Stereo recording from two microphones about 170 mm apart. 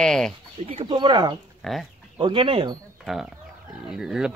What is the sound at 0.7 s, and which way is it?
Speech, 30° right (ahead or behind).